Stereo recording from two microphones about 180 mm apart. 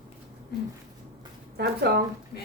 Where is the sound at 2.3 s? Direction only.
60° left (ahead or behind).